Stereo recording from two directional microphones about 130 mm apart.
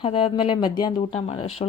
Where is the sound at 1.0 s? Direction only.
55° left (ahead or behind).